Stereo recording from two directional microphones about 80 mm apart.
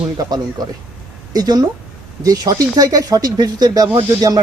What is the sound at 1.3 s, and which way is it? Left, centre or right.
Speech, right.